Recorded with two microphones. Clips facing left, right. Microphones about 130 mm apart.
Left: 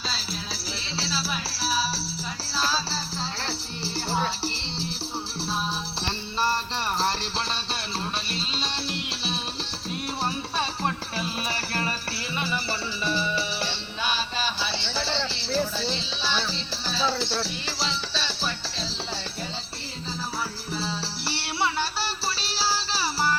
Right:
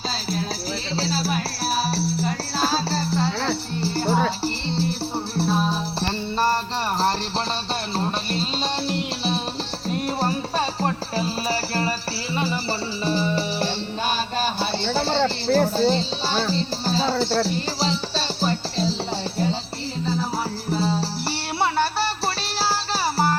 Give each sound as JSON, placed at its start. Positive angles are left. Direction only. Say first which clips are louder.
{"t": 0.9, "sound": "music", "louder": "right 6 dB", "side_deg": -50}
{"t": 7.9, "sound": "music", "louder": "right 8 dB", "side_deg": -45}
{"t": 20.7, "sound": "music", "louder": "right 8 dB", "side_deg": -45}